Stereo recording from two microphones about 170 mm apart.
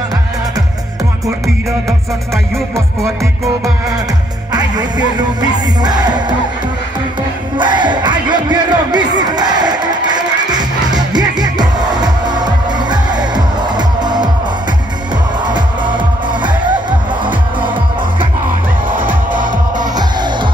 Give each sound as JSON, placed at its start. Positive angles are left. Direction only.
{"t": 4.5, "sound": "music", "side_deg": -25}
{"t": 7.5, "sound": "crowd", "side_deg": -25}
{"t": 15.4, "sound": "music", "side_deg": -25}
{"t": 17.2, "sound": "music", "side_deg": -30}
{"t": 18.9, "sound": "music", "side_deg": -50}